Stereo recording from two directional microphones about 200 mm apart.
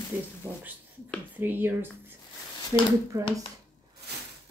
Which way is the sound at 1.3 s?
10° right (ahead or behind).